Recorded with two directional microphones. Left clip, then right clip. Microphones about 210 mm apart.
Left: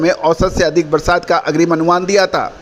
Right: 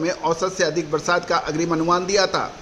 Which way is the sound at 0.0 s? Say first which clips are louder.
Left 9 dB; 35° left (ahead or behind).